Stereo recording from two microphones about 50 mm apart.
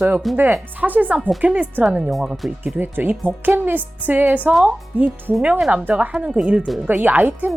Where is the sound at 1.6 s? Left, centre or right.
Right.